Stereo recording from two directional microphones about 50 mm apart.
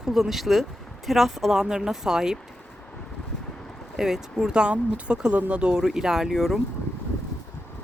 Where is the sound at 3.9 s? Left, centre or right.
Centre.